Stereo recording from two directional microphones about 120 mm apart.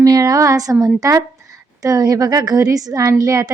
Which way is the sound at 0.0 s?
30° right (ahead or behind).